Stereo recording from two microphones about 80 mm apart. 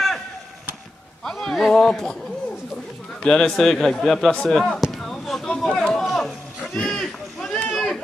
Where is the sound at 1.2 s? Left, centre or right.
Centre.